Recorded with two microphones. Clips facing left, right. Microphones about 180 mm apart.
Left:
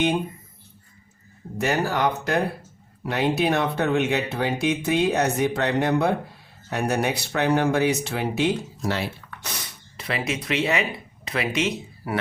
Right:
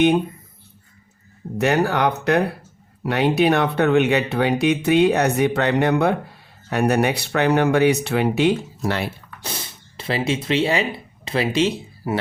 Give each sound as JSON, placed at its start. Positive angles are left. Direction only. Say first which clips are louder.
{"t": 1.5, "sound": "speech", "louder": "right 5 dB", "side_deg": -65}
{"t": 9.4, "sound": "speech", "louder": "right 5 dB", "side_deg": -30}